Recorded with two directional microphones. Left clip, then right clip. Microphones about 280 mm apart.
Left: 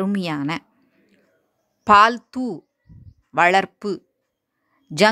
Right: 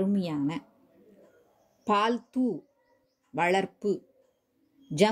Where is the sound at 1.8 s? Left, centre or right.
Left.